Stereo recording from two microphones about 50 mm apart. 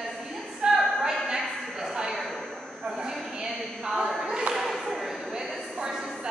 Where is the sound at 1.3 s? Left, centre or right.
Centre.